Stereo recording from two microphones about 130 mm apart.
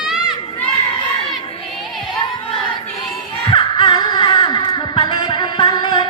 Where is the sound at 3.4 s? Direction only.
40° left (ahead or behind).